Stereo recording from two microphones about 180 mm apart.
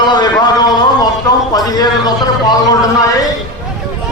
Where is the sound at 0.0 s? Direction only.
25° left (ahead or behind).